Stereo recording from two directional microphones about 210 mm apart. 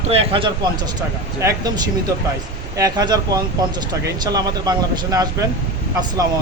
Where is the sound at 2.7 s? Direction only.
15° right (ahead or behind).